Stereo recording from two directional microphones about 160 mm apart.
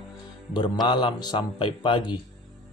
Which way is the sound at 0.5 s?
25° left (ahead or behind).